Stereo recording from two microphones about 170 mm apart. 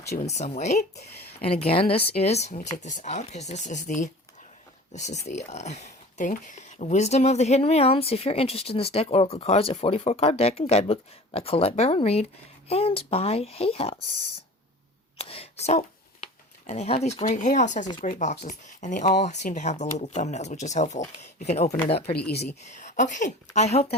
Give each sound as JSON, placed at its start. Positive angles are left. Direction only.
{"t": 0.3, "sound": "speech", "side_deg": 40}
{"t": 15.2, "sound": "a sound", "side_deg": 35}
{"t": 16.2, "sound": "speech", "side_deg": 40}